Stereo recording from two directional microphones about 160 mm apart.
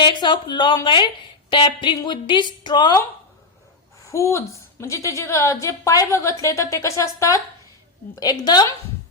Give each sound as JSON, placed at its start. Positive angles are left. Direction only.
{"t": 0.0, "sound": "a woman's voice", "side_deg": 30}
{"t": 4.1, "sound": "a woman's voice", "side_deg": 20}